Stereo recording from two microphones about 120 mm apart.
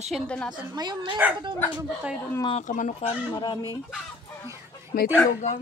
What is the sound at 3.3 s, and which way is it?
Speech, 35° left (ahead or behind).